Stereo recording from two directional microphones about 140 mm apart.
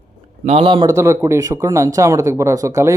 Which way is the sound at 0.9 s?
20° right (ahead or behind).